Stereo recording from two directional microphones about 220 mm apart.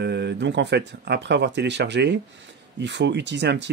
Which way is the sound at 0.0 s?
50° right (ahead or behind).